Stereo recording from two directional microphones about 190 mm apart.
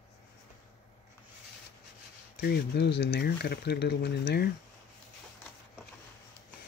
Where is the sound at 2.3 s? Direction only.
55° left (ahead or behind).